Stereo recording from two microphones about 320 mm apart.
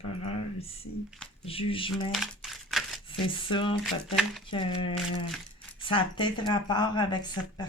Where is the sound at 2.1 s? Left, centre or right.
Centre.